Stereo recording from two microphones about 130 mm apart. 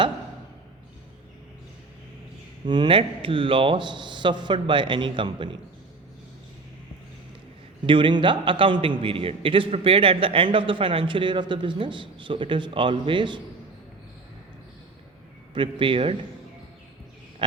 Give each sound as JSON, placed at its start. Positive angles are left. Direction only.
{"t": 2.6, "sound": "a man's voice", "side_deg": -35}
{"t": 7.9, "sound": "a man's voice", "side_deg": -40}
{"t": 15.5, "sound": "a man's voice", "side_deg": -40}